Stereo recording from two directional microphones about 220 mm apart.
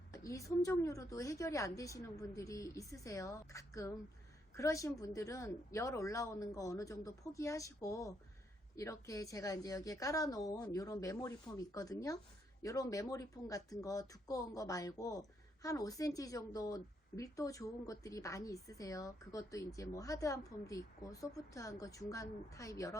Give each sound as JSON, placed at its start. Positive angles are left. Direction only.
{"t": 0.1, "sound": "speech", "side_deg": 15}